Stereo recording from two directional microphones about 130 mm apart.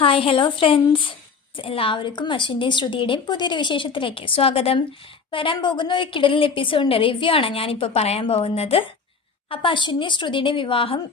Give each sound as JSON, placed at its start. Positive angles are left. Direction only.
{"t": 0.0, "sound": "a woman's voice", "side_deg": 45}
{"t": 9.5, "sound": "a woman's voice", "side_deg": 40}